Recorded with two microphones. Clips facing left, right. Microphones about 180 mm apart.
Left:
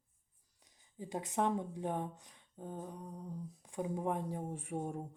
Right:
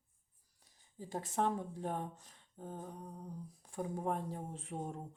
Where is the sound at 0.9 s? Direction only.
15° left (ahead or behind).